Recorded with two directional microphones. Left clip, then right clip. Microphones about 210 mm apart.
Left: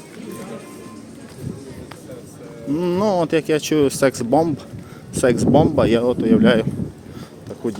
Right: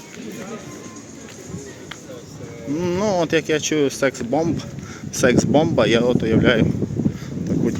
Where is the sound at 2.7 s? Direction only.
15° left (ahead or behind).